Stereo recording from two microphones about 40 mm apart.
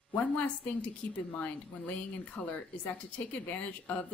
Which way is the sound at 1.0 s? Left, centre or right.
Left.